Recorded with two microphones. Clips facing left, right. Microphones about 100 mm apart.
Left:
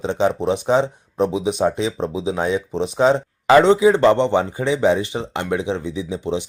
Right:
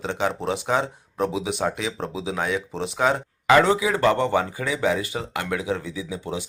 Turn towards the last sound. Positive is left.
turn(degrees=25)  # may be behind; listen again after turning